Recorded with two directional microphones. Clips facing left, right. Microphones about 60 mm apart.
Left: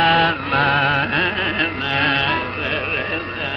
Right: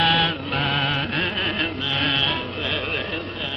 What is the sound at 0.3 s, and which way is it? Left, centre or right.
Chant, left.